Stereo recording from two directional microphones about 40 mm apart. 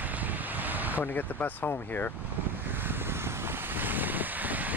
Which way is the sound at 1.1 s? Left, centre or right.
Left.